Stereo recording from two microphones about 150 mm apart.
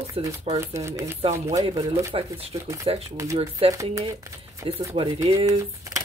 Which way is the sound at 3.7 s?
20° right (ahead or behind).